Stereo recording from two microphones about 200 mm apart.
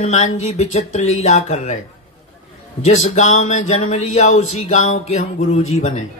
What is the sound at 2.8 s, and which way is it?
Speech, 35° left (ahead or behind).